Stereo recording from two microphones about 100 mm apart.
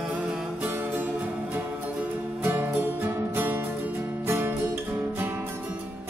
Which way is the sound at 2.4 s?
25° right (ahead or behind).